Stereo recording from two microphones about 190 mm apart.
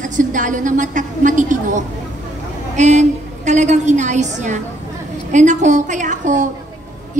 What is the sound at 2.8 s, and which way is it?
A woman's voice, 40° right (ahead or behind).